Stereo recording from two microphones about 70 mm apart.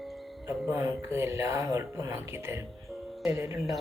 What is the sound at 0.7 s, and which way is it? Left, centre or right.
Speech, right.